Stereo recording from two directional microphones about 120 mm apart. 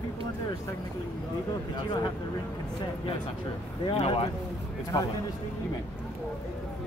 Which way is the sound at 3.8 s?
55° left (ahead or behind).